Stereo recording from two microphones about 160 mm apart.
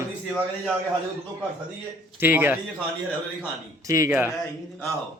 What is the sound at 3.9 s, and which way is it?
Speech, 15° right (ahead or behind).